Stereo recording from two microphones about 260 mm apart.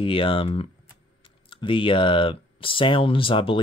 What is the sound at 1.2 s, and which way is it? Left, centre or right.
Speech, centre.